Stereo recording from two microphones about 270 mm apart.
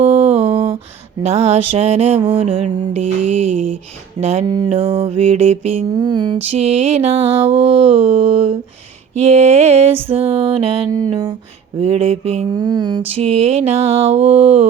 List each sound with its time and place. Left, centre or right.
0.0 s a sound: right
1.2 s mantra: right
3.0 s mantra: right
4.2 s mantra: right
11.1 s a sound: centre
11.8 s mantra: right